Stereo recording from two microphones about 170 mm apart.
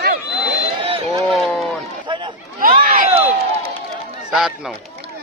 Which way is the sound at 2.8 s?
60° right (ahead or behind).